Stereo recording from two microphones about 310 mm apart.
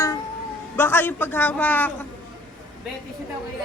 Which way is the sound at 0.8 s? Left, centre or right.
Centre.